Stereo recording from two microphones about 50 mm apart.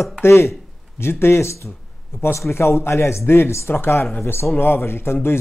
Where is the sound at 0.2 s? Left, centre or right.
Left.